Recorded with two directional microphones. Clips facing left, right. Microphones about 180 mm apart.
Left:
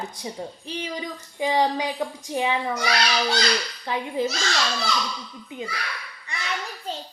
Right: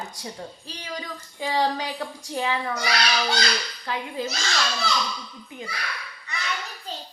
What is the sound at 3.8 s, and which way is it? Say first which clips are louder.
Speech: left 4 dB; 20° left (ahead or behind).